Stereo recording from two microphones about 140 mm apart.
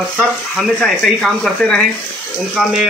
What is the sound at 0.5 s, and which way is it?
A man's voice, 5° left (ahead or behind).